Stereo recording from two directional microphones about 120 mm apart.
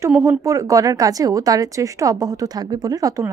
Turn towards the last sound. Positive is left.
turn(degrees=-30)  # may be behind; listen again after turning